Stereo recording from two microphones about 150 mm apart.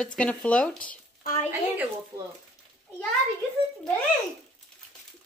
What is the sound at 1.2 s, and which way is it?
Speech, 55° left (ahead or behind).